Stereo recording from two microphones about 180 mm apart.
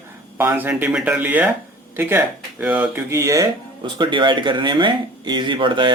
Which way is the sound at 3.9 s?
25° right (ahead or behind).